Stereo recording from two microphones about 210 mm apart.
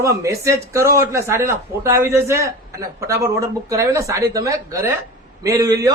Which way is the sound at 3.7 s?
15° right (ahead or behind).